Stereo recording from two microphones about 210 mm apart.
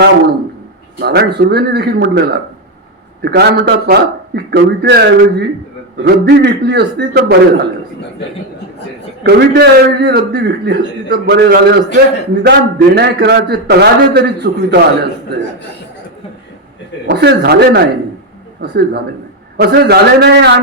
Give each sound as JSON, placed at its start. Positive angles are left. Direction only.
{"t": 0.9, "sound": "a man's voice", "side_deg": -45}
{"t": 9.2, "sound": "a man's voice", "side_deg": -50}
{"t": 17.1, "sound": "a man's voice", "side_deg": -50}